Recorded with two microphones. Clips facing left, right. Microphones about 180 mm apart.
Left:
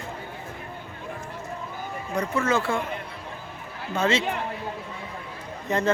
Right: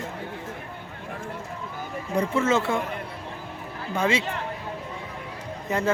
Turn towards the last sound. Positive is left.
turn(degrees=-10)  # may be behind; listen again after turning